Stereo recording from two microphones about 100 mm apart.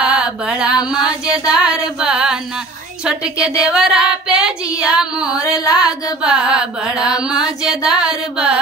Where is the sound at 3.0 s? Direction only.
10° right (ahead or behind).